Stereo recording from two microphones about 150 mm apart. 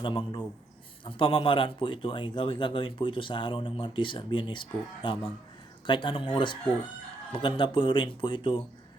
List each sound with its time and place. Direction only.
0.0 s speech: 30° left (ahead or behind)